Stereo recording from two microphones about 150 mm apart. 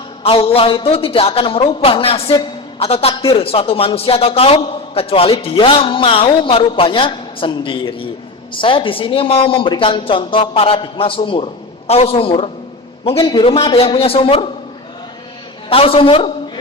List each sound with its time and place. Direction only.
0.2 s speech: 40° left (ahead or behind)
15.7 s speech: 40° left (ahead or behind)